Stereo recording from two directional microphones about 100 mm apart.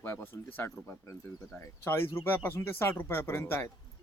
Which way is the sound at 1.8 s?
25° left (ahead or behind).